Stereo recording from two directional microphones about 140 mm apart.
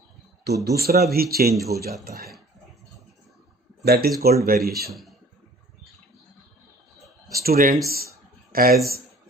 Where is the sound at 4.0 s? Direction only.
90° right.